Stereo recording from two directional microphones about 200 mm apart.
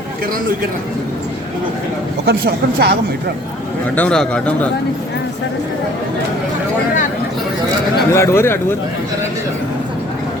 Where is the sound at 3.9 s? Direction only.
5° left (ahead or behind).